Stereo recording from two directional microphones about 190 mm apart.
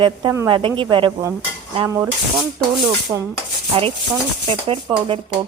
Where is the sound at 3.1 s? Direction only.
15° right (ahead or behind).